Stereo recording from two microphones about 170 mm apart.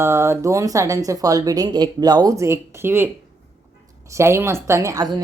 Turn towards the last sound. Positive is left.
turn(degrees=-15)  # may be behind; listen again after turning